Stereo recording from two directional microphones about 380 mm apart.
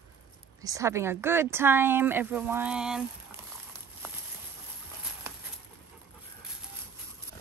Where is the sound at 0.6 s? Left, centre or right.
Centre.